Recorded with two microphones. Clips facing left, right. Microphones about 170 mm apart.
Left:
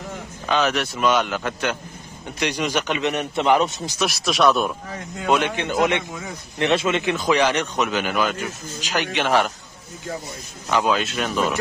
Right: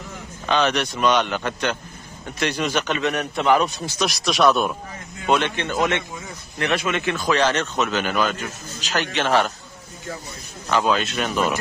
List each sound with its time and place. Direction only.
0.5 s a man's voice: 5° left (ahead or behind); by 4.0 s 20° left (ahead or behind)
4.0 s speech: centre (ahead or behind)
5.3 s a man's voice: 10° left (ahead or behind)
10.7 s a man's voice: 10° left (ahead or behind)